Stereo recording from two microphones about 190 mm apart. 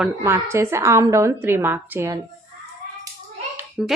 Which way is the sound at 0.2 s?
15° right (ahead or behind).